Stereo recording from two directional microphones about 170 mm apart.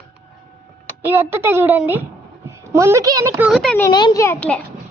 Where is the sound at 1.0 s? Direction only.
10° right (ahead or behind).